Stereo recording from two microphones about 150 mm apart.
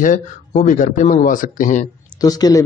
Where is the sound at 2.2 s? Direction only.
25° left (ahead or behind).